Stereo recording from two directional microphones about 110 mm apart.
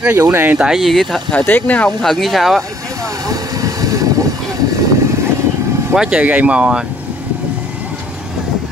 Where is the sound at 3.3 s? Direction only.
30° right (ahead or behind).